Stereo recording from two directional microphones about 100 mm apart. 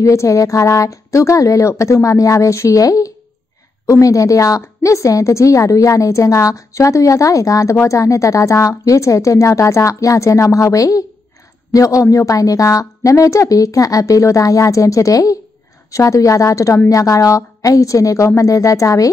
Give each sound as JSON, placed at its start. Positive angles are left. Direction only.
{"t": 0.0, "sound": "a woman's voice", "side_deg": 30}